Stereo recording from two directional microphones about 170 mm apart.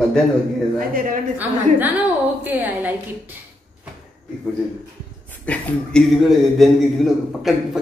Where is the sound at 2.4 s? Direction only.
10° right (ahead or behind).